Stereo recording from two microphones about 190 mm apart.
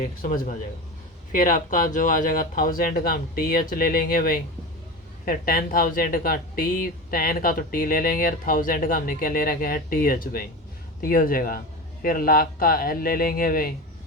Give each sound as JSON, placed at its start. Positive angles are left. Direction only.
{"t": 0.0, "sound": "speech", "side_deg": 40}